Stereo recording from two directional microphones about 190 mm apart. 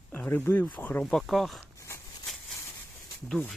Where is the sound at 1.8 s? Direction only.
15° left (ahead or behind).